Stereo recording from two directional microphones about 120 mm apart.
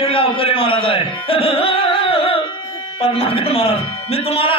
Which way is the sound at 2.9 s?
55° left (ahead or behind).